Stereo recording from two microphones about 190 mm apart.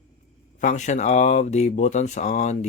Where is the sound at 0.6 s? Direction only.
40° left (ahead or behind).